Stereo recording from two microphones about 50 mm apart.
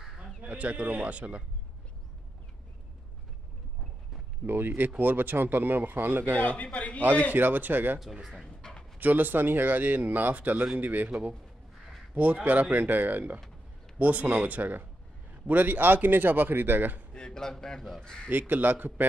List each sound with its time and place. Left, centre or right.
0.4 s speech: right
4.5 s speech: right
6.3 s a man's voice: left
7.3 s speech: right
8.0 s speech: centre
8.5 s a sound: centre
9.0 s speech: right
12.4 s speech: right
17.1 s speech: centre
18.5 s speech: right